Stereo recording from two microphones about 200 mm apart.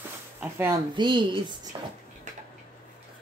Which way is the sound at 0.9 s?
25° right (ahead or behind).